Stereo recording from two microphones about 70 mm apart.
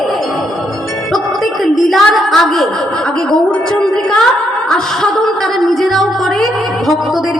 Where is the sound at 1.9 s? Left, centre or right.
Centre.